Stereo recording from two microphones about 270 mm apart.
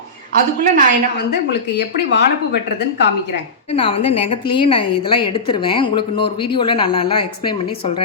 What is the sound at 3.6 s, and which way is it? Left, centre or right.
A woman's voice, centre.